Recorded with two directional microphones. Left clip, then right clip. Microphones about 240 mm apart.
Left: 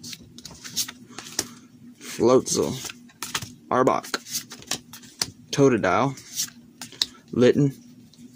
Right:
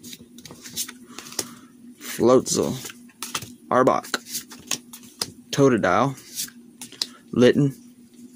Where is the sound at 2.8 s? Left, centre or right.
Centre.